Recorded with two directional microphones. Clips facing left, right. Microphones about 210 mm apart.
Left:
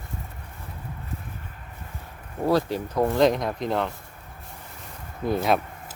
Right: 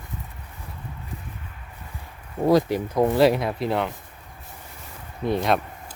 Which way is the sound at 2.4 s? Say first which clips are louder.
Right 4 dB; 15° right (ahead or behind).